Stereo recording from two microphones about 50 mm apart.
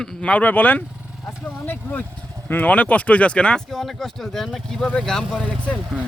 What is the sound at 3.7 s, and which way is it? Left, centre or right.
Speech, centre.